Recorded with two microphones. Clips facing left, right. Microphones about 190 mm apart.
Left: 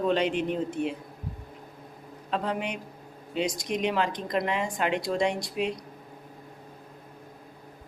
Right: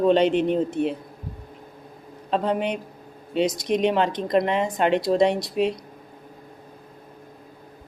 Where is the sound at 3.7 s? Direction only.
25° right (ahead or behind).